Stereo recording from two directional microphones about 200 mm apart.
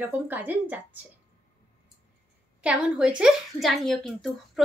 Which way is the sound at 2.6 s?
5° right (ahead or behind).